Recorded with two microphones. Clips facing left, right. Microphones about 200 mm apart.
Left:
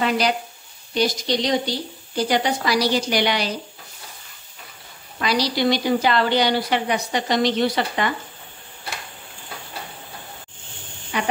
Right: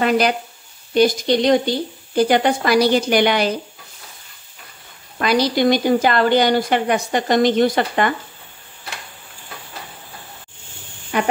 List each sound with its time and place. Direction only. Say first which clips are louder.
0.9 s a woman's voice: right 6 dB; 55° right (ahead or behind)
5.2 s a woman's voice: right 4 dB; 50° right (ahead or behind)
11.1 s speech: right 5 dB; 50° right (ahead or behind)